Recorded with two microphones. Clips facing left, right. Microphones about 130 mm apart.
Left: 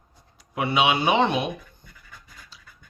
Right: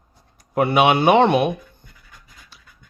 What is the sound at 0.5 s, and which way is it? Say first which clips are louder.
Speech: right 6 dB; 50° right (ahead or behind).